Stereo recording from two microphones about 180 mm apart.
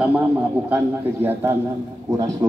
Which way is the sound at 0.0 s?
10° right (ahead or behind).